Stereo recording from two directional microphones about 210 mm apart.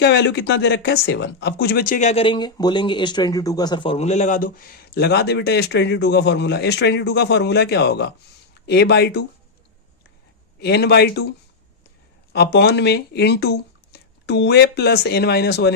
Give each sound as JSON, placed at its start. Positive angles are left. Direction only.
{"t": 0.0, "sound": "speech", "side_deg": 55}
{"t": 10.6, "sound": "speech", "side_deg": 50}